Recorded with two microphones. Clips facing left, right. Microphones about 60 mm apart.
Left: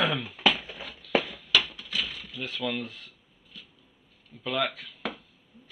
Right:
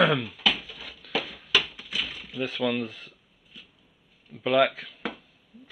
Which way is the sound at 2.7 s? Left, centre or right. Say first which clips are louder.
Right 2 dB; centre.